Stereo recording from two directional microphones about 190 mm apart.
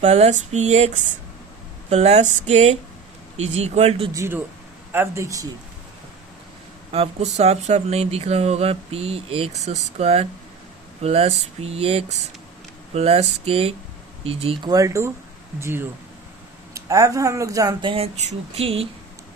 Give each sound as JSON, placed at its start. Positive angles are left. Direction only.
{"t": 0.0, "sound": "speech", "side_deg": -35}
{"t": 1.9, "sound": "speech", "side_deg": -35}
{"t": 4.1, "sound": "speech", "side_deg": -15}
{"t": 6.9, "sound": "speech", "side_deg": -35}